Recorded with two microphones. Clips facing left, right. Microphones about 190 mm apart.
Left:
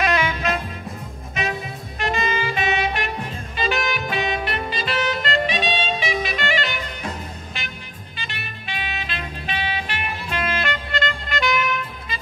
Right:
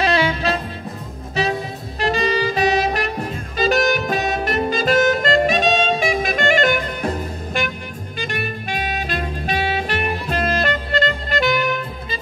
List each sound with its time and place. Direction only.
0.0 s music: 30° right (ahead or behind)
2.0 s saxophone: 35° right (ahead or behind)
7.5 s music: 50° right (ahead or behind)